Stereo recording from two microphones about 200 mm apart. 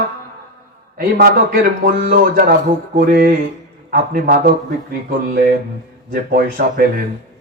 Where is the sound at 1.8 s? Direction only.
45° right (ahead or behind).